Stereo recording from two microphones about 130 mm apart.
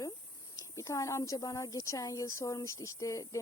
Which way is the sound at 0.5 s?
25° left (ahead or behind).